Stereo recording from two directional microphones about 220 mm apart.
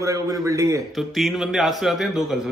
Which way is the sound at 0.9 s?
Centre (ahead or behind).